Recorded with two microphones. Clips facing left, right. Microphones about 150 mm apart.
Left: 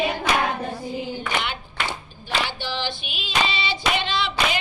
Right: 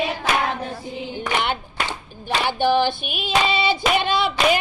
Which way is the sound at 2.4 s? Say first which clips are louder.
Right 11 dB; 55° right (ahead or behind).